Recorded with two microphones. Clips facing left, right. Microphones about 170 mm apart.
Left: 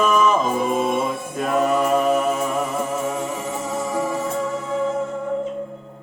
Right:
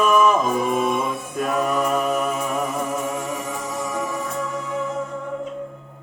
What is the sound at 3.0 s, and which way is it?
Music, 30° left (ahead or behind).